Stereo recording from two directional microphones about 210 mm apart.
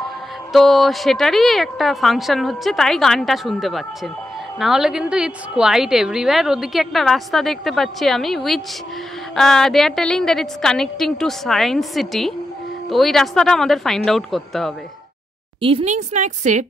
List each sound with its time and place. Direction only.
0.5 s a woman's voice: centre (ahead or behind)
15.6 s speech: 30° right (ahead or behind)